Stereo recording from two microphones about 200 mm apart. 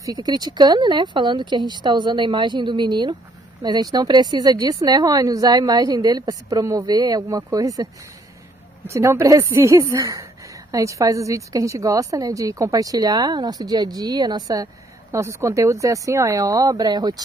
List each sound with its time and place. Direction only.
0.0 s speech: 20° right (ahead or behind)